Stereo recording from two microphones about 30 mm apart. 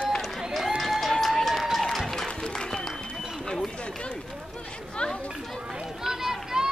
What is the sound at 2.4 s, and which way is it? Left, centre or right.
Applause, left.